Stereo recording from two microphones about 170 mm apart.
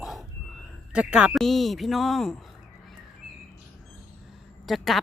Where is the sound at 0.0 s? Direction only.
Centre (ahead or behind).